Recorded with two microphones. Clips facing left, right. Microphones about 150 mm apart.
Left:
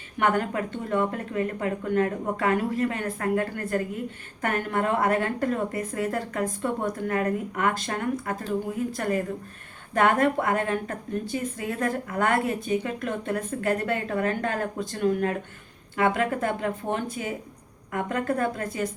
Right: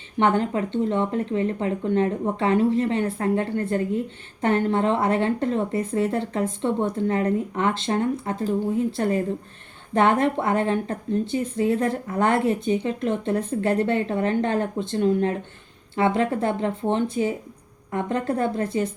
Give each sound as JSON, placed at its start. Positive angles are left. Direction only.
{"t": 0.2, "sound": "speech", "side_deg": -25}